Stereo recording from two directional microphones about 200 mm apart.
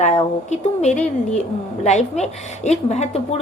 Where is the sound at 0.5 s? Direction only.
35° left (ahead or behind).